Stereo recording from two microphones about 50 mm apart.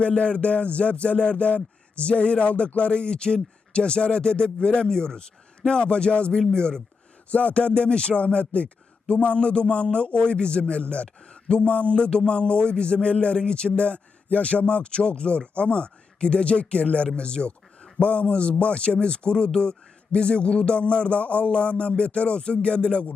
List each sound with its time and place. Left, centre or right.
0.0 s speech: left